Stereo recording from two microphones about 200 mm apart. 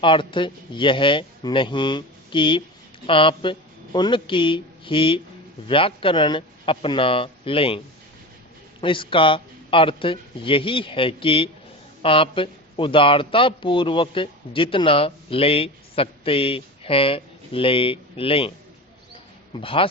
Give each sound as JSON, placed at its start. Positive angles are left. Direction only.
{"t": 0.0, "sound": "a man's voice", "side_deg": 25}
{"t": 8.8, "sound": "a man's voice", "side_deg": 25}
{"t": 19.6, "sound": "a man's voice", "side_deg": 25}